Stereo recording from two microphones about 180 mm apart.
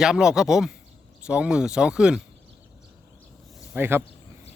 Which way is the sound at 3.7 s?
15° right (ahead or behind).